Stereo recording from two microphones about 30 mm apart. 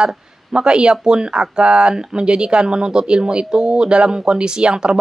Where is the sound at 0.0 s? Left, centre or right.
Right.